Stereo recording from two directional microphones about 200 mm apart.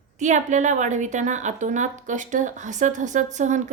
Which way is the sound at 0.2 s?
35° right (ahead or behind).